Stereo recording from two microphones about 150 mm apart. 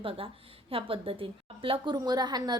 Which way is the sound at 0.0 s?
40° right (ahead or behind).